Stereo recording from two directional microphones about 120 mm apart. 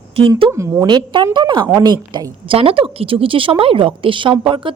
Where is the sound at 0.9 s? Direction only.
40° right (ahead or behind).